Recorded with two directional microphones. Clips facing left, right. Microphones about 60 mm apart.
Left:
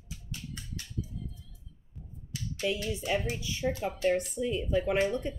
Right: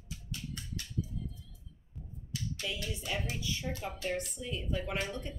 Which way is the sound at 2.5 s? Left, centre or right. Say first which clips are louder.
Left 10 dB; left.